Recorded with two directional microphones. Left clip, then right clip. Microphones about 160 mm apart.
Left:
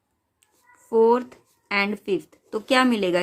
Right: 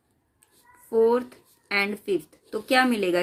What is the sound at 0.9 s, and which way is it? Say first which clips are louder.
Speech: left 3 dB; 45° left (ahead or behind).